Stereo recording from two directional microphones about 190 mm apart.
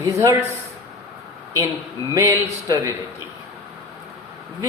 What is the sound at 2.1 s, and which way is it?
Speech, 15° right (ahead or behind).